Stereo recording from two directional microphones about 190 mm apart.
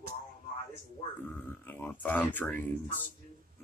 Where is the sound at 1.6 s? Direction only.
10° left (ahead or behind).